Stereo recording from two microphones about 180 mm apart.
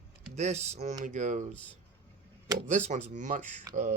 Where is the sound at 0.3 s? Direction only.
40° right (ahead or behind).